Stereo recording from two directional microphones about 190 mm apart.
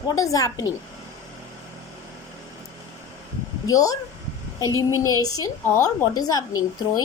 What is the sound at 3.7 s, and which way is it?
Speech, 20° left (ahead or behind).